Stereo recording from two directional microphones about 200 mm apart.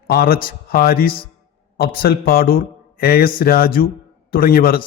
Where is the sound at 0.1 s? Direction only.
50° left (ahead or behind).